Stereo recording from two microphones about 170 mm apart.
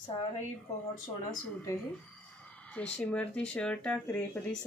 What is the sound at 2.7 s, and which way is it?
Speech, 5° left (ahead or behind).